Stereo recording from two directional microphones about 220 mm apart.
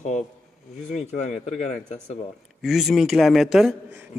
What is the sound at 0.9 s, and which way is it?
Speech, 35° left (ahead or behind).